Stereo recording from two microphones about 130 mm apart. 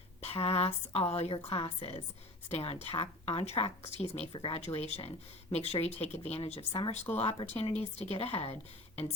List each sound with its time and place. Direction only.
0.2 s speech: 50° left (ahead or behind)
4.4 s speech: 40° left (ahead or behind)
4.6 s speech: 55° left (ahead or behind)